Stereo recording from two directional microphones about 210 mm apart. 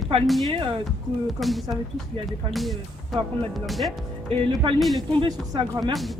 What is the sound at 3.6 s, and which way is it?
Speech, centre (ahead or behind).